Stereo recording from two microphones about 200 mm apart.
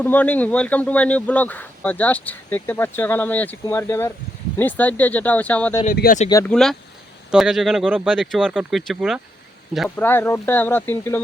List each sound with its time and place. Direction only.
0.0 s speech: 10° left (ahead or behind)
5.8 s speech: 45° left (ahead or behind)
6.4 s speech: 5° left (ahead or behind)
9.9 s speech: 10° left (ahead or behind)